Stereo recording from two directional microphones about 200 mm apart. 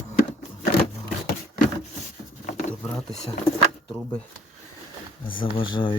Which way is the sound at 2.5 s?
35° left (ahead or behind).